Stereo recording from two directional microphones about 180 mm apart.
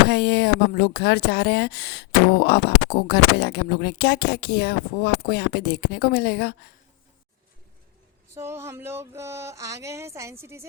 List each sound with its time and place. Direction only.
0.1 s speech: 65° left (ahead or behind)
8.4 s music: 15° right (ahead or behind)